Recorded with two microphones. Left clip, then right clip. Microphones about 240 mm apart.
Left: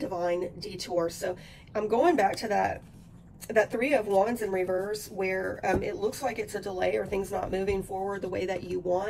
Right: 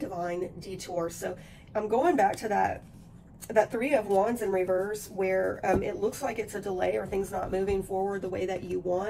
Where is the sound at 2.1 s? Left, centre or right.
Centre.